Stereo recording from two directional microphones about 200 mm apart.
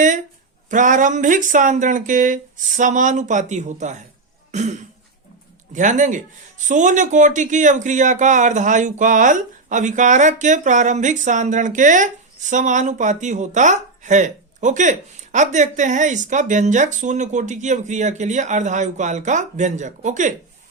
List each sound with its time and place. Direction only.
0.7 s speech: 40° right (ahead or behind)